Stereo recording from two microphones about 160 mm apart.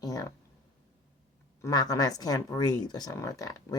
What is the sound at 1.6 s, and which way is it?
Speech, 25° left (ahead or behind).